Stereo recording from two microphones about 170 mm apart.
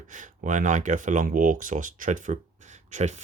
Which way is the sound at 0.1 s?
50° right (ahead or behind).